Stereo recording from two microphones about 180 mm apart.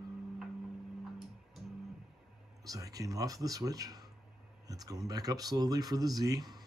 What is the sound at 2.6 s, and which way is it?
Speech, 20° right (ahead or behind).